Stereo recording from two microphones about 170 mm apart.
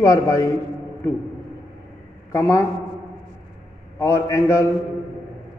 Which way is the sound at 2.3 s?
15° left (ahead or behind).